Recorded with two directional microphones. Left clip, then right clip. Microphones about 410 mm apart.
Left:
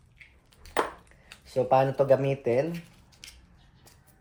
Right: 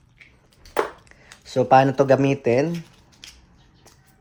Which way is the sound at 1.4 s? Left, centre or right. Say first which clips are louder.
Right 7 dB; right.